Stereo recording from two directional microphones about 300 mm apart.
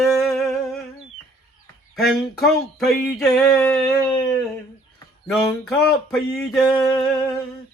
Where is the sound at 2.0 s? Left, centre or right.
Centre.